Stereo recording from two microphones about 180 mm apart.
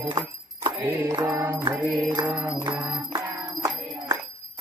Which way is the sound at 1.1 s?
15° right (ahead or behind).